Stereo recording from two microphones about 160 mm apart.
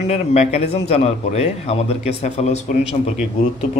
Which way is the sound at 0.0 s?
45° left (ahead or behind).